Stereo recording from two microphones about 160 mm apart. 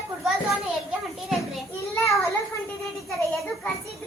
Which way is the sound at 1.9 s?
20° left (ahead or behind).